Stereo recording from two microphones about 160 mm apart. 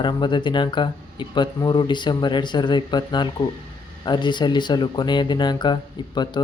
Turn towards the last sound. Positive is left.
turn(degrees=30)  # may be behind; listen again after turning